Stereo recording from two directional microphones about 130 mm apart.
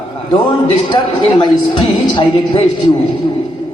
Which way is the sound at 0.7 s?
40° left (ahead or behind).